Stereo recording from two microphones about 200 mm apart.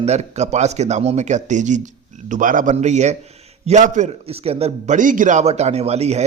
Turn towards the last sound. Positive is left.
turn(degrees=-30)  # may be behind; listen again after turning